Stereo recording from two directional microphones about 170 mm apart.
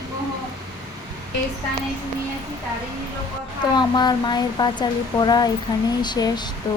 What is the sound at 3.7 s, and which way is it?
Speech, 25° left (ahead or behind).